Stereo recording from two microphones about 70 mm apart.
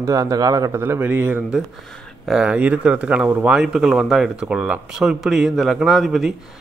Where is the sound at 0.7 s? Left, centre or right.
Right.